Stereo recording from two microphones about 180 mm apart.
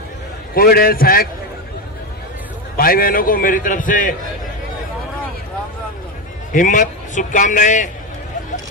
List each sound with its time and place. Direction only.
0.5 s a man's voice: 55° left (ahead or behind)
2.7 s a man's voice: 55° left (ahead or behind)
6.5 s a man's voice: 45° left (ahead or behind)